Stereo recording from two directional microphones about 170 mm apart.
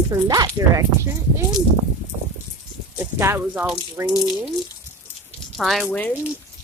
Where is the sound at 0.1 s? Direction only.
25° right (ahead or behind).